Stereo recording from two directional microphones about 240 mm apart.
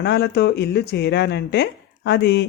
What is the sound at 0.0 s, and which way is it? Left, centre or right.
Speech, left.